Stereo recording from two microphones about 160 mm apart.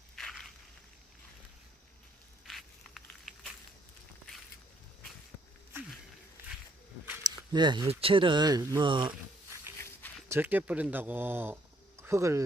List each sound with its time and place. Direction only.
0.2 s crushing: centre (ahead or behind)
2.5 s a sound: centre (ahead or behind)
7.2 s speech: 25° right (ahead or behind)
10.2 s speech: 15° right (ahead or behind)